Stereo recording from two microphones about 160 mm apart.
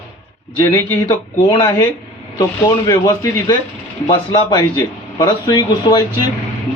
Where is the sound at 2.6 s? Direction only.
20° left (ahead or behind).